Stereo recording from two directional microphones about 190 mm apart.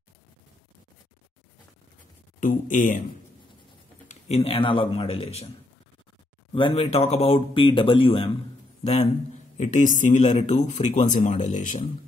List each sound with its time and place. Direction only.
2.4 s speech: 45° left (ahead or behind)
4.1 s speech: 35° left (ahead or behind)
6.5 s speech: 30° left (ahead or behind)